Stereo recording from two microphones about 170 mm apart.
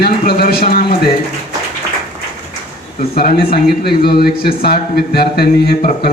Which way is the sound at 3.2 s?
65° left (ahead or behind).